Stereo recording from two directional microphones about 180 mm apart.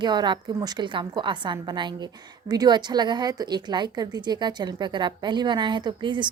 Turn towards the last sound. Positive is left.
turn(degrees=-25)  # may be behind; listen again after turning